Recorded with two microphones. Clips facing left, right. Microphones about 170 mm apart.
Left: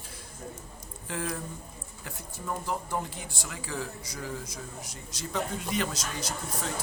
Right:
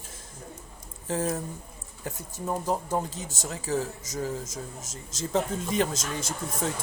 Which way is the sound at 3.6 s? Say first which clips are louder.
Right 8 dB; 45° right (ahead or behind).